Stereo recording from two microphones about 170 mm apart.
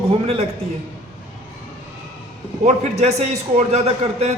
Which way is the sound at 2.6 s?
40° right (ahead or behind).